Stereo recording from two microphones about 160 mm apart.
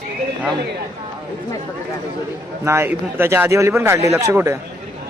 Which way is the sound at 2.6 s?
15° right (ahead or behind).